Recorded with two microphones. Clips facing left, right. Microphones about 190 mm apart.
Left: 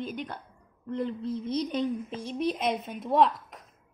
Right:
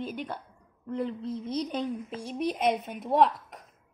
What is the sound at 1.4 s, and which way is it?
Speech, 35° right (ahead or behind).